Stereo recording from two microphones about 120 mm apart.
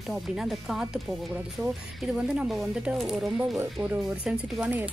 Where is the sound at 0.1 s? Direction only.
Centre (ahead or behind).